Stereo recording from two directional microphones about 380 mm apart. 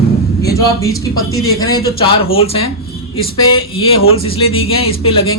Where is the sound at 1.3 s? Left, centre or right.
Centre.